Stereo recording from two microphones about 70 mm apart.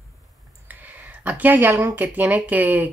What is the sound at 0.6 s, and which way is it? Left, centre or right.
Speech, right.